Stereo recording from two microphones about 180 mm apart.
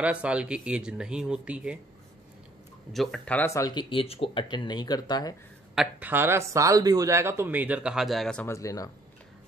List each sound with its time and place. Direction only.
0.0 s speech: 5° right (ahead or behind)
2.9 s speech: centre (ahead or behind); by 5.3 s 20° left (ahead or behind)
5.8 s speech: 10° right (ahead or behind)
8.5 s speech: 20° left (ahead or behind)